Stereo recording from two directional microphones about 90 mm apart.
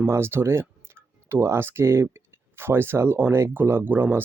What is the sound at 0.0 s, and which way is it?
Speech, 25° right (ahead or behind).